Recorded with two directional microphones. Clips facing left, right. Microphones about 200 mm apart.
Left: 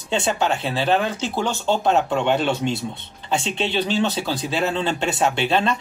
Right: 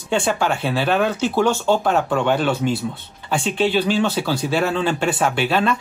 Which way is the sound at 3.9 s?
20° left (ahead or behind).